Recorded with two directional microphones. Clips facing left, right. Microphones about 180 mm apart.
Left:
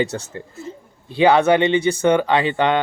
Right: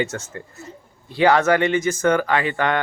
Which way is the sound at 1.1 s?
15° left (ahead or behind).